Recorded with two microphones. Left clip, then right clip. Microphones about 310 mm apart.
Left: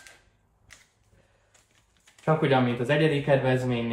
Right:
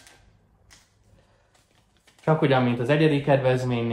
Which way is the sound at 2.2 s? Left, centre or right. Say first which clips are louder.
Right 2 dB; centre.